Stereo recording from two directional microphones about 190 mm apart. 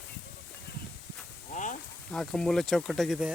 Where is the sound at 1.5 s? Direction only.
40° left (ahead or behind).